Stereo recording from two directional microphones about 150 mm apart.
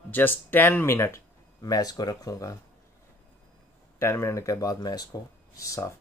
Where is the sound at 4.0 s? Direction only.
15° left (ahead or behind).